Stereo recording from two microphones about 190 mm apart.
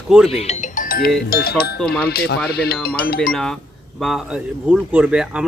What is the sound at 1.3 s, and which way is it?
Speech, 55° left (ahead or behind).